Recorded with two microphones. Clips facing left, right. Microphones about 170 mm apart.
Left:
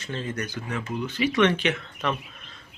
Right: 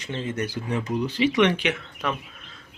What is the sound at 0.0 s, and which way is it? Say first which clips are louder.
Speech: right 3 dB; 20° right (ahead or behind).